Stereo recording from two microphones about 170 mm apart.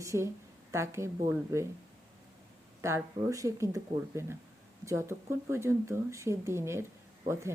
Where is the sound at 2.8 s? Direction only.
15° right (ahead or behind).